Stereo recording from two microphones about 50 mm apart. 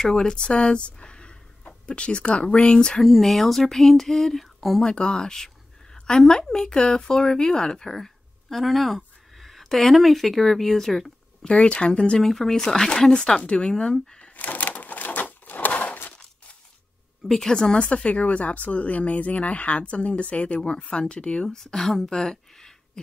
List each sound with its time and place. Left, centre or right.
0.1 s speech: centre
3.0 s speech: centre
4.8 s speech: centre
11.4 s speech: left
14.3 s a sound: left
17.2 s speech: centre
17.7 s speech: left
21.5 s speech: centre